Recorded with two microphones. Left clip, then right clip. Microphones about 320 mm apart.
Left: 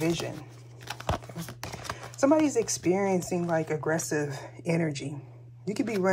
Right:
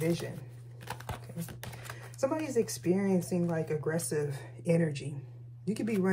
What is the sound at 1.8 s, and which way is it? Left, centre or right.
Speech, left.